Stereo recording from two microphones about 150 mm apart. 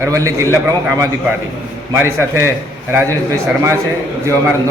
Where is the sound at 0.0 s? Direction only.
20° right (ahead or behind).